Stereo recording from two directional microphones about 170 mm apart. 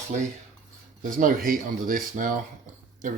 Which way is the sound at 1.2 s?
55° right (ahead or behind).